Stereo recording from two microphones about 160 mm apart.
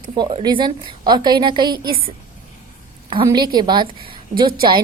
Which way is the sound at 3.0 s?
30° right (ahead or behind).